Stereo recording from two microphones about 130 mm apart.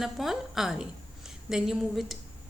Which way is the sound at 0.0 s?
Centre (ahead or behind).